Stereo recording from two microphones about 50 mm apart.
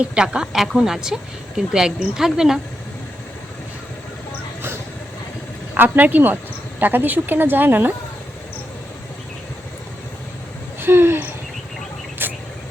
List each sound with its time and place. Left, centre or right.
0.0 s speech: centre
5.7 s speech: right
10.8 s hoot: right
12.2 s a sound: right